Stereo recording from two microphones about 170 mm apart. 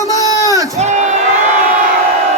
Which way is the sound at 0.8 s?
45° right (ahead or behind).